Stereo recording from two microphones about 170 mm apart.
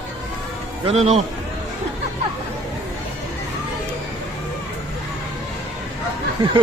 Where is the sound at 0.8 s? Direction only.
40° right (ahead or behind).